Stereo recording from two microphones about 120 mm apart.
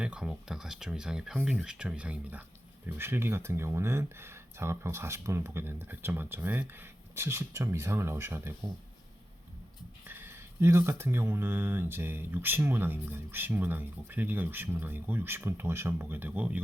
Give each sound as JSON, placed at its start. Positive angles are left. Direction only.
{"t": 0.0, "sound": "speech", "side_deg": -5}
{"t": 10.1, "sound": "speech", "side_deg": -20}